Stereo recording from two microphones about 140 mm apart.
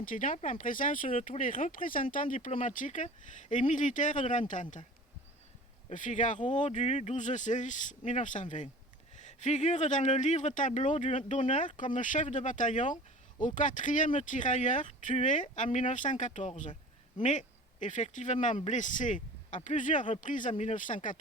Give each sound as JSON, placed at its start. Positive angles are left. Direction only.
{"t": 0.0, "sound": "speech", "side_deg": 70}
{"t": 5.9, "sound": "speech", "side_deg": 65}